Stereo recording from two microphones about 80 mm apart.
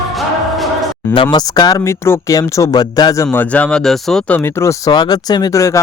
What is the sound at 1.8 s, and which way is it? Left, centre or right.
Speech, left.